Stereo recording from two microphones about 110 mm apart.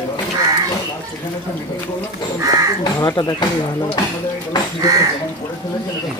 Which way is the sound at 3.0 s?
35° left (ahead or behind).